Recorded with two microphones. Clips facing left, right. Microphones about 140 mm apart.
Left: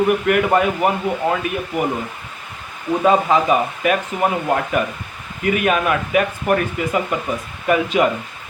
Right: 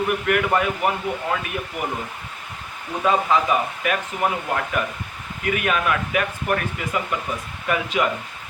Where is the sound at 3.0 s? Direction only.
25° left (ahead or behind).